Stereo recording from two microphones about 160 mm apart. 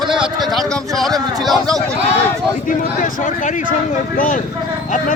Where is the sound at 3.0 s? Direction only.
55° left (ahead or behind).